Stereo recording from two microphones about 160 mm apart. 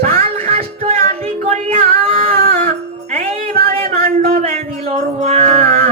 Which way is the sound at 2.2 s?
60° right (ahead or behind).